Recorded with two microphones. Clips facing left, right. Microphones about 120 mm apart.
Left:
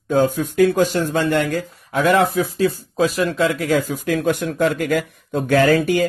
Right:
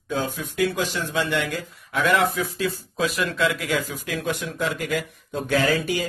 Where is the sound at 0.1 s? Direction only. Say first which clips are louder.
Left 10 dB; 50° left (ahead or behind).